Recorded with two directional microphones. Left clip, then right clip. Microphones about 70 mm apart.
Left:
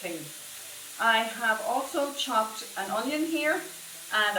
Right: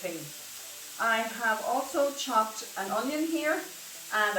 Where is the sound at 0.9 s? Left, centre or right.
Centre.